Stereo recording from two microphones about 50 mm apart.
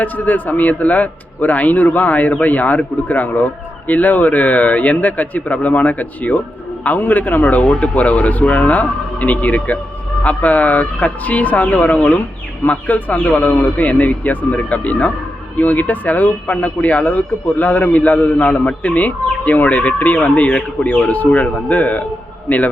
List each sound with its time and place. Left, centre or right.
0.0 s speech: left